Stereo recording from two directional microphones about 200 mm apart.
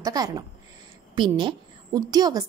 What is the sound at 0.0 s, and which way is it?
A woman's voice, 20° right (ahead or behind).